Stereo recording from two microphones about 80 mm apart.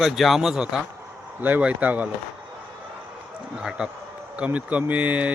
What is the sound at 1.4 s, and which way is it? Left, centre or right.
Speech, centre.